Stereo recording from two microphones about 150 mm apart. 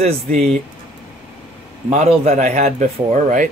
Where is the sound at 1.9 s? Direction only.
45° right (ahead or behind).